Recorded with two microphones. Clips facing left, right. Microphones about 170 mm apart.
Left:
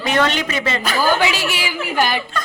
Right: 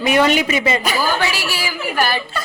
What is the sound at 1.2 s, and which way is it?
A woman's voice, 20° left (ahead or behind).